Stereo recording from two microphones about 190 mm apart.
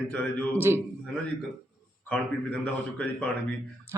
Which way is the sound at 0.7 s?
15° right (ahead or behind).